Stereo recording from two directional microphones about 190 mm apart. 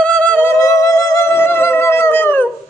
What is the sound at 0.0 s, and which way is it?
Music, 5° left (ahead or behind).